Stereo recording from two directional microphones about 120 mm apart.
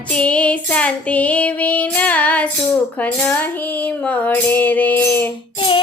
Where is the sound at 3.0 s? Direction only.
15° left (ahead or behind).